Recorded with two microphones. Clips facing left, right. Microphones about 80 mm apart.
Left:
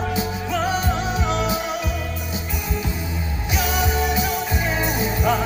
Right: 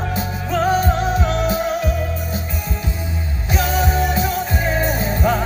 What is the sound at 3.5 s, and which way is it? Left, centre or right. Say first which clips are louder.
Music: right 4 dB; right.